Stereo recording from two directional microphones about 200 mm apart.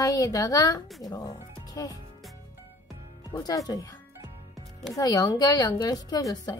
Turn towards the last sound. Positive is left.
turn(degrees=20)  # may be behind; listen again after turning